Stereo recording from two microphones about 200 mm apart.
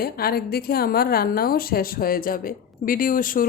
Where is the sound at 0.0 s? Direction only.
50° left (ahead or behind).